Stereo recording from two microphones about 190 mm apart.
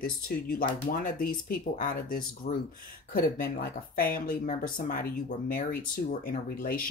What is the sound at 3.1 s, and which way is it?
Speech, 50° left (ahead or behind).